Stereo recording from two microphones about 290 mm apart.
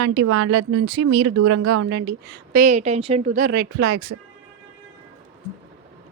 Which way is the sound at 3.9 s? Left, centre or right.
Right.